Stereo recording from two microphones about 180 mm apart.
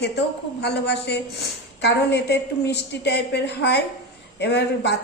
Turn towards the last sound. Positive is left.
turn(degrees=70)  # may be behind; listen again after turning